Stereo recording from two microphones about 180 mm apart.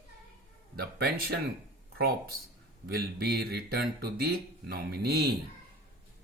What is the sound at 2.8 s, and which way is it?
Speech, 60° right (ahead or behind).